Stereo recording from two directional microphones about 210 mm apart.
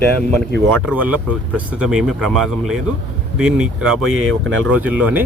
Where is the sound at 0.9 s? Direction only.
5° right (ahead or behind).